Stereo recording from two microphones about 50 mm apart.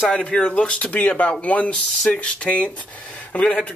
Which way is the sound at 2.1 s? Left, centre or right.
Left.